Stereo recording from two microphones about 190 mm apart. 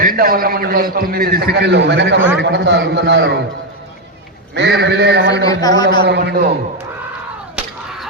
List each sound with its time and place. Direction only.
0.0 s a man's voice: 50° right (ahead or behind); by 3.3 s 65° right (ahead or behind)
4.5 s a man's voice: 60° right (ahead or behind)
5.5 s speech: 20° left (ahead or behind)
6.0 s a man's voice: 60° right (ahead or behind)